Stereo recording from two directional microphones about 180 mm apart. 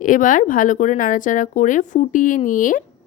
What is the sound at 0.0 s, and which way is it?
Speech, 45° left (ahead or behind).